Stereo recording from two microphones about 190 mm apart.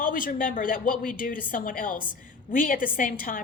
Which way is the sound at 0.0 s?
45° left (ahead or behind).